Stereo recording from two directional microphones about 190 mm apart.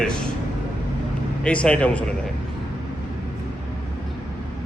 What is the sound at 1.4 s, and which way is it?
Speech, 5° left (ahead or behind).